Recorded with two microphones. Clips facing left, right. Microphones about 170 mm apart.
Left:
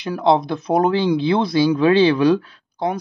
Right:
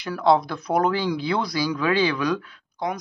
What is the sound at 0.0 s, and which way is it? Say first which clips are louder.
Speech: left 2 dB; 20° left (ahead or behind).